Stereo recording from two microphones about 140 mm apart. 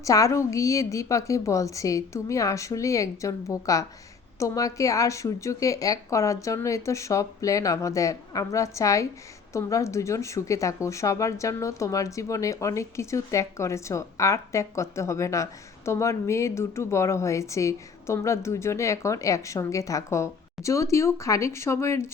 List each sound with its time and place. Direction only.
0.0 s speech: 25° left (ahead or behind)